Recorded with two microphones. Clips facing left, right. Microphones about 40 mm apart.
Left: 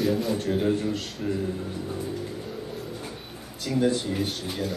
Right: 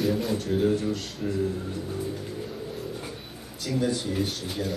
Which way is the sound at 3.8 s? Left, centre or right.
Left.